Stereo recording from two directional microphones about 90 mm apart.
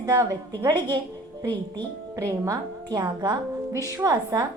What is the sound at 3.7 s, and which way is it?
Speech, 35° right (ahead or behind).